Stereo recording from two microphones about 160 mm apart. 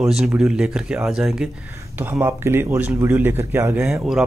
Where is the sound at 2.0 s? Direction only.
15° right (ahead or behind).